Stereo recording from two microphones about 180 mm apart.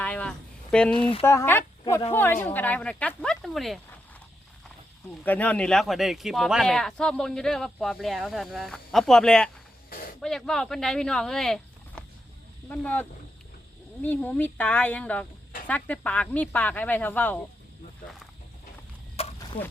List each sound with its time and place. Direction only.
0.0 s a sound: 5° left (ahead or behind)
0.9 s speech: 30° left (ahead or behind)
1.2 s speech: 15° left (ahead or behind)
1.8 s speech: 25° left (ahead or behind)
2.1 s speech: 10° left (ahead or behind)
5.2 s speech: 10° left (ahead or behind)
19.2 s a sound: 35° left (ahead or behind)